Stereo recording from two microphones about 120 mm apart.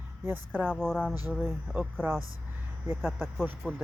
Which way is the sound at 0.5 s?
5° left (ahead or behind).